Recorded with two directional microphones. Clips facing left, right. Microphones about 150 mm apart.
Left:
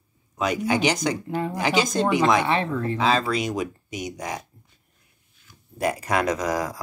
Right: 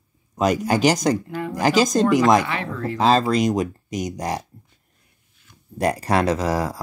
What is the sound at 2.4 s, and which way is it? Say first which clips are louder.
Speech: left 4 dB; 25° left (ahead or behind).